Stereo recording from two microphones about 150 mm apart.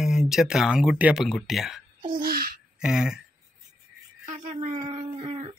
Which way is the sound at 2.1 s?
75° right (ahead or behind).